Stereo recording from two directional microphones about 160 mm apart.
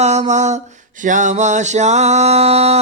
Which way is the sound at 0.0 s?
45° right (ahead or behind).